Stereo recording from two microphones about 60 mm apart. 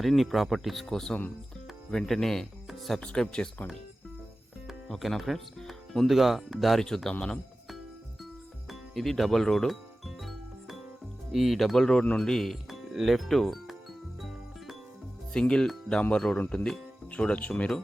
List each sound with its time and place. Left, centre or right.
0.0 s speech: centre
3.0 s speech: centre
4.9 s speech: centre
8.7 s speech: centre
10.2 s music: centre
11.3 s speech: centre
15.3 s speech: centre
16.0 s speech: centre